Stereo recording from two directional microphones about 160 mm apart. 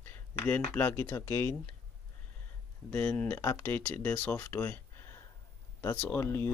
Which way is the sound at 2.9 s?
10° left (ahead or behind).